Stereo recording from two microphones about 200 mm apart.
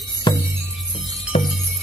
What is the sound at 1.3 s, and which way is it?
Jingle bell, 30° left (ahead or behind).